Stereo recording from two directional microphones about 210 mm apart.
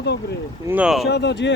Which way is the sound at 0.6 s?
5° right (ahead or behind).